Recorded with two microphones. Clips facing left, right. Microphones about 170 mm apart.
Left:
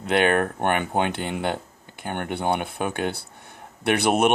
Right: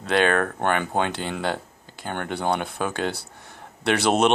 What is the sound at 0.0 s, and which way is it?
Speech, 20° left (ahead or behind).